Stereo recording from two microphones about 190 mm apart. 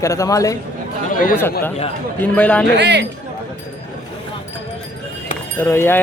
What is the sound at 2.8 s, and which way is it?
Speech, 60° right (ahead or behind).